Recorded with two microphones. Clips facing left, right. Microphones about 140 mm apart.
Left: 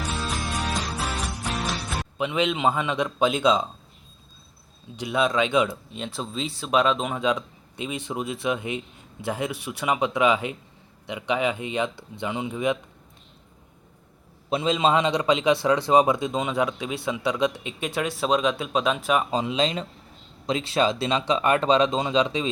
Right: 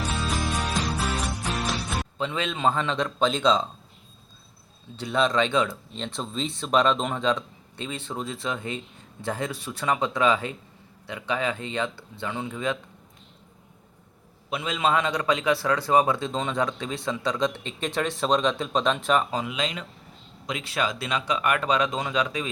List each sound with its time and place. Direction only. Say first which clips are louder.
0.1 s music: right 1 dB; centre (ahead or behind)
2.1 s a man's voice: left 7 dB; 15° left (ahead or behind)
4.9 s a man's voice: even; 10° left (ahead or behind)
14.5 s a man's voice: left 3 dB; 25° left (ahead or behind); by 19.2 s 10° left (ahead or behind)
19.3 s speech: left 5 dB; 25° left (ahead or behind)